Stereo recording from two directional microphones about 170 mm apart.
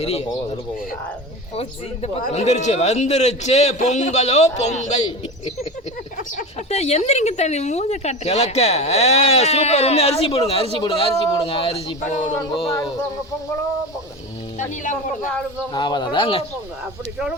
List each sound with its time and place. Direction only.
0.0 s a woman's voice: 40° left (ahead or behind)
2.2 s a woman's voice: 40° left (ahead or behind)
6.3 s a woman's voice: 40° left (ahead or behind)
12.7 s speech: 15° left (ahead or behind)
15.7 s speech: 25° left (ahead or behind)